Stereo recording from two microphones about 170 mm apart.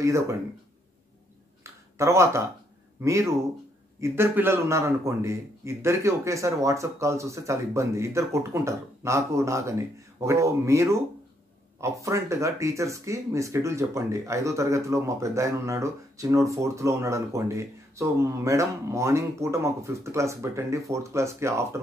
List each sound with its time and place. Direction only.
0.0 s speech: 20° right (ahead or behind)
1.6 s a sound: 15° right (ahead or behind)
3.0 s speech: 15° right (ahead or behind)